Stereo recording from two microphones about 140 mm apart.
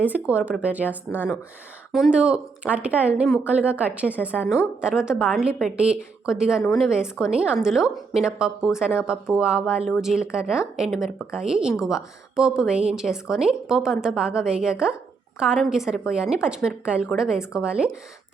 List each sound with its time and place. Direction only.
0.0 s speech: 10° right (ahead or behind)